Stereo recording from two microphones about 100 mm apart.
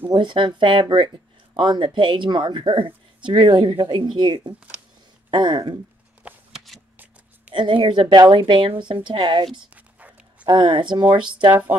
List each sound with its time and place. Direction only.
0.1 s speech: 50° right (ahead or behind)
7.5 s speech: 55° right (ahead or behind)
9.8 s dog: 15° right (ahead or behind)
10.4 s speech: 55° right (ahead or behind)